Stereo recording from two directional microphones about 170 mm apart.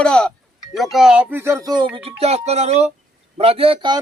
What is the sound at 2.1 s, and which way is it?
Speech, 40° right (ahead or behind).